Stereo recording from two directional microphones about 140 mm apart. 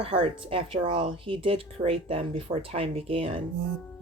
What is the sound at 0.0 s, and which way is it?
Speech, 40° right (ahead or behind).